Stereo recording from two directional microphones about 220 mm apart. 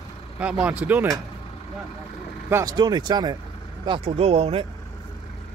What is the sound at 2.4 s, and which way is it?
Speech, 15° right (ahead or behind).